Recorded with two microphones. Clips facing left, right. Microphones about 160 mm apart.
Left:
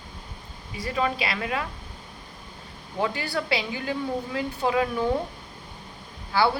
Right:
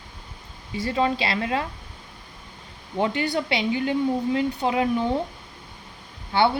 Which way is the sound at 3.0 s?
20° right (ahead or behind).